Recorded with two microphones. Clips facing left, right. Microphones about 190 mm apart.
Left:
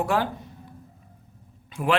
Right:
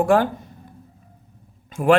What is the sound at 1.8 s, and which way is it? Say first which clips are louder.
Speech: right 8 dB; 50° right (ahead or behind).